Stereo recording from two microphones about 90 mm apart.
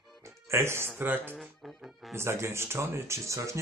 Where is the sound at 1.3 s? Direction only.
Centre (ahead or behind).